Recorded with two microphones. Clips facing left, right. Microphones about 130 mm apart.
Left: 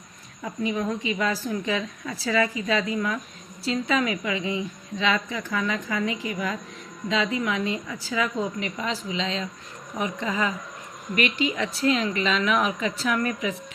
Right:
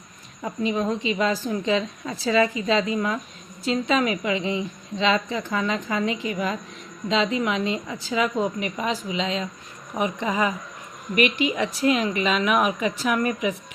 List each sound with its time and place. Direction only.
0.6 s a woman's voice: 25° right (ahead or behind)